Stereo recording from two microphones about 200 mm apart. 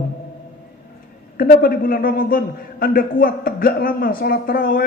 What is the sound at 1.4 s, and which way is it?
Speech, 45° left (ahead or behind).